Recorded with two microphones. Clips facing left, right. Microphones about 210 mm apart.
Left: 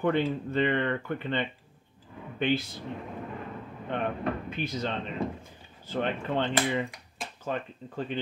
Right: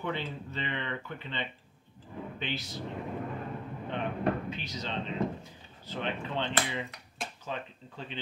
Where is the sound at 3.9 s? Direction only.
55° left (ahead or behind).